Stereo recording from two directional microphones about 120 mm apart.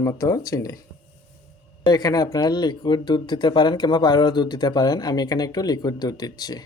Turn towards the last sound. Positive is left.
turn(degrees=35)  # may be behind; listen again after turning